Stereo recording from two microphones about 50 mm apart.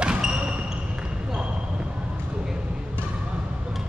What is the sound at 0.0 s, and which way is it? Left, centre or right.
Basketball bounce, right.